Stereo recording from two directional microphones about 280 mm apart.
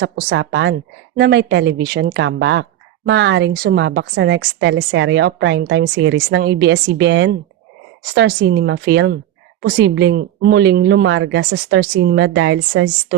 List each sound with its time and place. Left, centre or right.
0.0 s a woman's voice: right